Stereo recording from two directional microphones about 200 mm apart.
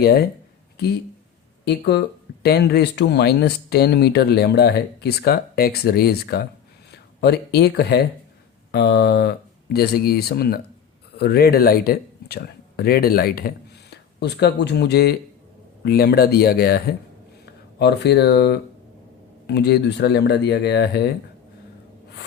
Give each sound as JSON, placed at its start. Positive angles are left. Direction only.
{"t": 0.0, "sound": "speech", "side_deg": 50}
{"t": 1.6, "sound": "speech", "side_deg": 55}